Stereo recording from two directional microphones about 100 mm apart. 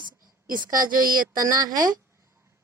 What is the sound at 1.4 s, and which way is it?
Speech, 40° right (ahead or behind).